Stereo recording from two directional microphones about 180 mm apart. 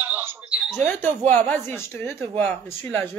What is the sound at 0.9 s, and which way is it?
Speech, 10° left (ahead or behind).